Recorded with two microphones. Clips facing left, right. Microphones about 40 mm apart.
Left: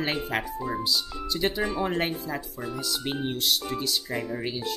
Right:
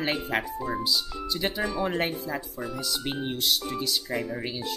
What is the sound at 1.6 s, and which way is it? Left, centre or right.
Speech, centre.